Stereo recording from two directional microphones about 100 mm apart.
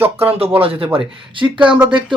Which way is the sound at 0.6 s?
70° right (ahead or behind).